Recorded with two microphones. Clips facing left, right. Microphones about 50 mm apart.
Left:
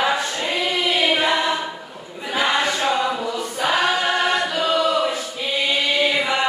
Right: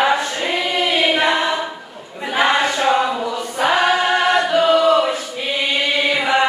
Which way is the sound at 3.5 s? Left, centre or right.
Right.